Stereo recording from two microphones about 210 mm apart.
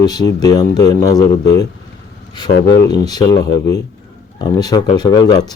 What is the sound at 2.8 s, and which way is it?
Speech, 20° left (ahead or behind).